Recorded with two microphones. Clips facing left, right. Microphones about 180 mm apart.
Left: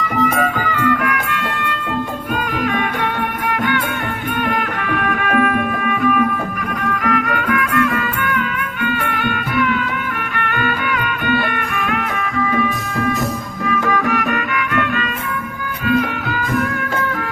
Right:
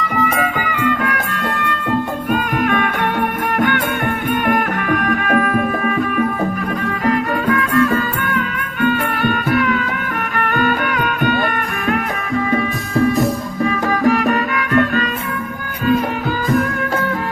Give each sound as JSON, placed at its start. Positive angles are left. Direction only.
{"t": 0.0, "sound": "music", "side_deg": 0}
{"t": 0.7, "sound": "music", "side_deg": -15}
{"t": 1.0, "sound": "music", "side_deg": -35}
{"t": 2.3, "sound": "music", "side_deg": -50}
{"t": 7.0, "sound": "music", "side_deg": -30}